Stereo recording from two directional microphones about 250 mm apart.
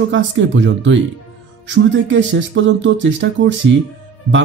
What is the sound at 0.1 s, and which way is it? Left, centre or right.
Speech, right.